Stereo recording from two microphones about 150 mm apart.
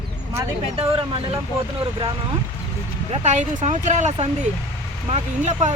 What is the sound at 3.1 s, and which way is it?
Speech, 50° right (ahead or behind).